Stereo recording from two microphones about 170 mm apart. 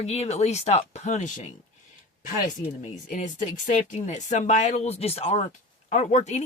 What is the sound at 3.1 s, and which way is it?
Speech, 50° left (ahead or behind).